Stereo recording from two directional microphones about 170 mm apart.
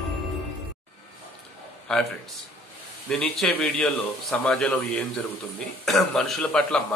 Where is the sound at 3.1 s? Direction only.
5° left (ahead or behind).